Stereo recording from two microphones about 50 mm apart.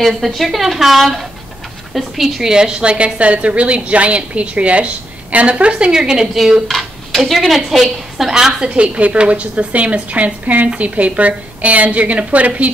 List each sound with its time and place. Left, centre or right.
0.0 s a woman's voice: centre
8.6 s a woman's voice: right